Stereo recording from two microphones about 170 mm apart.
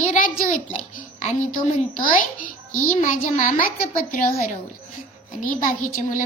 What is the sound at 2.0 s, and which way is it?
A woman's voice, 55° left (ahead or behind).